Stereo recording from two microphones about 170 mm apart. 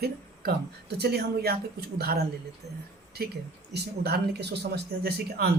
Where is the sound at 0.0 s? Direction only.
70° right (ahead or behind).